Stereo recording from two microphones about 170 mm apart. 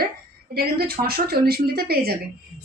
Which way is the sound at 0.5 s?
65° right (ahead or behind).